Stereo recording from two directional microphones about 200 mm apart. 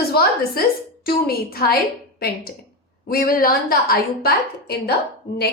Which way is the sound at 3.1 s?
45° left (ahead or behind).